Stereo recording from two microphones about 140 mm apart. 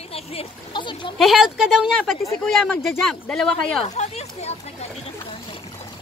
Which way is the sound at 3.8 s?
50° left (ahead or behind).